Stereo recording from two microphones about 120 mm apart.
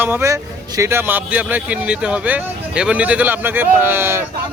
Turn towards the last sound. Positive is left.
turn(degrees=-20)  # may be behind; listen again after turning